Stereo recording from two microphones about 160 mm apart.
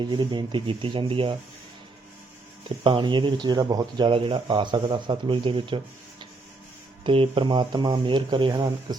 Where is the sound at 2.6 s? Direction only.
30° right (ahead or behind).